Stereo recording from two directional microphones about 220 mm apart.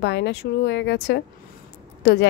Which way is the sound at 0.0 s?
50° left (ahead or behind).